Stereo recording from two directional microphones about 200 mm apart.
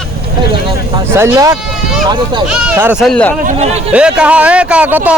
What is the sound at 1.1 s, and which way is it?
Speech, 15° right (ahead or behind).